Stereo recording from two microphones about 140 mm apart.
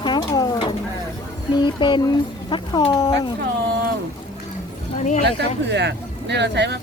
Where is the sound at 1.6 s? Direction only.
35° left (ahead or behind).